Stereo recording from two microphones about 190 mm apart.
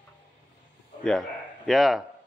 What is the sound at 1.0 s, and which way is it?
Speech, 5° left (ahead or behind).